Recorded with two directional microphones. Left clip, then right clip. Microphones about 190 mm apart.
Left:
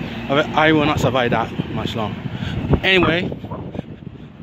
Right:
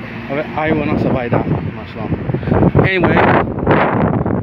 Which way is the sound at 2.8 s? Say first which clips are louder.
Even; centre (ahead or behind).